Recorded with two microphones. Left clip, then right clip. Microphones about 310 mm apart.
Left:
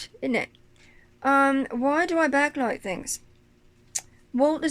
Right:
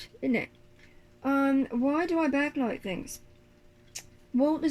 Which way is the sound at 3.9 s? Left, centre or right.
Left.